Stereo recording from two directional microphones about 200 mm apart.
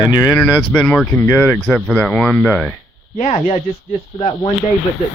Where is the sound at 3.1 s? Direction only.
35° left (ahead or behind).